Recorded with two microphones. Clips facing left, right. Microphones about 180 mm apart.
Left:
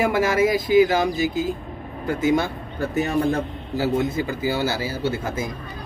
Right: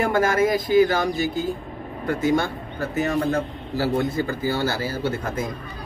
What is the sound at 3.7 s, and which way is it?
Speech, 20° left (ahead or behind).